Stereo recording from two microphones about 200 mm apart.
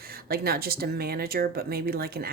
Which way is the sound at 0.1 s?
50° right (ahead or behind).